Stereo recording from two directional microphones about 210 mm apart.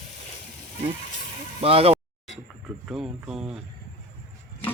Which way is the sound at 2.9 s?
5° right (ahead or behind).